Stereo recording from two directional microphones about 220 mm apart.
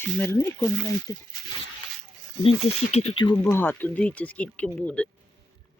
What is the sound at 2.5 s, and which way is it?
Speech, 30° left (ahead or behind).